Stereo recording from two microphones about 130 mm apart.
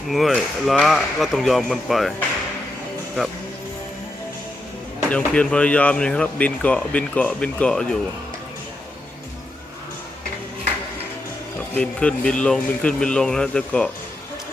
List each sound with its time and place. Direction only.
0.1 s speech: centre (ahead or behind)
5.1 s speech: 10° left (ahead or behind)
11.7 s speech: 10° left (ahead or behind)